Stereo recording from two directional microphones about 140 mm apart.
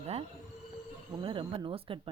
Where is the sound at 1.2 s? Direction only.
40° right (ahead or behind).